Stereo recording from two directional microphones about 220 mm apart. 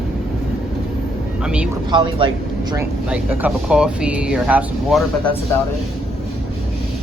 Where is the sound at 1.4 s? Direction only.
5° right (ahead or behind).